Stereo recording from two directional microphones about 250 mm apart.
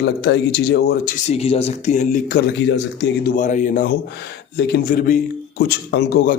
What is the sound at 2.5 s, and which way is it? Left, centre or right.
Speech, left.